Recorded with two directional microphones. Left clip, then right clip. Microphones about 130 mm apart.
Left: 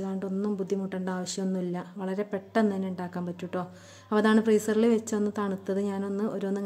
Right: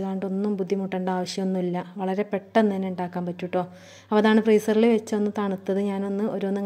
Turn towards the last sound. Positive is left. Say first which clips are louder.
# right 4 dB
turn(degrees=-15)  # may be behind; listen again after turning